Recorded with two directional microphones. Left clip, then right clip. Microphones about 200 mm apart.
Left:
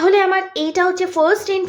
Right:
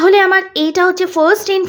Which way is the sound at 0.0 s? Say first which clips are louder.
Right 5 dB; 25° right (ahead or behind).